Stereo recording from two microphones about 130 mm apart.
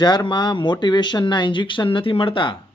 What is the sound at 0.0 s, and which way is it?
Speech, 35° left (ahead or behind).